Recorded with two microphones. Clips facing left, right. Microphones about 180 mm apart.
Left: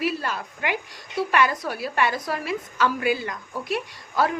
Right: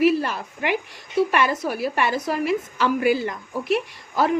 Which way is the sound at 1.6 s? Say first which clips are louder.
Right 2 dB; 20° right (ahead or behind).